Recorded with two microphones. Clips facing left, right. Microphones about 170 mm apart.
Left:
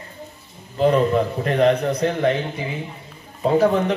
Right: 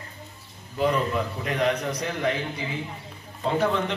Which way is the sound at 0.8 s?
35° left (ahead or behind).